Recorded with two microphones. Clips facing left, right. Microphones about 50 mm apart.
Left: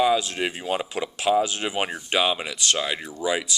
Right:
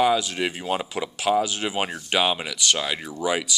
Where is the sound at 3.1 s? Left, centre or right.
Right.